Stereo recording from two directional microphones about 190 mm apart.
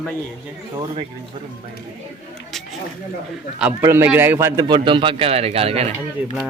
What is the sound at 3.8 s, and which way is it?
A man's voice, 10° right (ahead or behind).